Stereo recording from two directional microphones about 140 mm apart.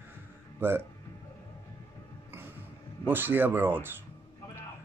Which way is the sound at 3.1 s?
15° right (ahead or behind).